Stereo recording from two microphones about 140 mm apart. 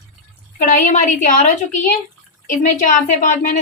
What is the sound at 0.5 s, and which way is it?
Speech, 70° left (ahead or behind).